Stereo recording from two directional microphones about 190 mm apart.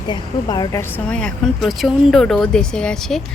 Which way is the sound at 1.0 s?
5° left (ahead or behind).